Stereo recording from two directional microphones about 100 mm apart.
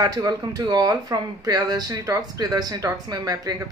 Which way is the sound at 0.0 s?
40° right (ahead or behind).